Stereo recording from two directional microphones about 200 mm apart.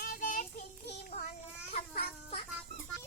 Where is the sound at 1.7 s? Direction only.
30° left (ahead or behind).